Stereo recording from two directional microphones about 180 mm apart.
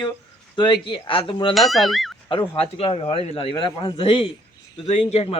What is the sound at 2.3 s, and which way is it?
A man's voice, 30° left (ahead or behind).